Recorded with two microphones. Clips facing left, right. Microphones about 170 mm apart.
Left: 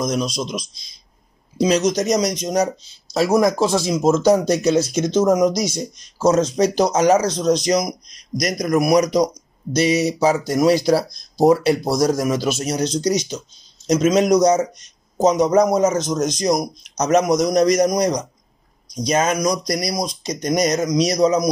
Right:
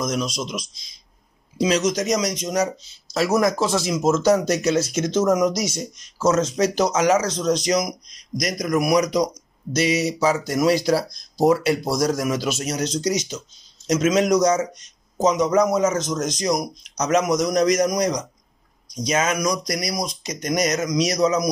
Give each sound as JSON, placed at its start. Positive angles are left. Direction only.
{"t": 0.0, "sound": "a man's voice", "side_deg": 35}